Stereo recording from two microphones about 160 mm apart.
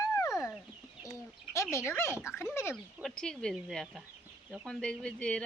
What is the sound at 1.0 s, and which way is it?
Bird, 20° left (ahead or behind).